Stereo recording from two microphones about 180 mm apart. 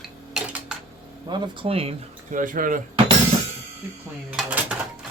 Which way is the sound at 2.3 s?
45° right (ahead or behind).